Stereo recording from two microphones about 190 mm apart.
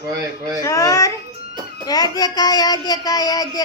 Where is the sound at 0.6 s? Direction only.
15° left (ahead or behind).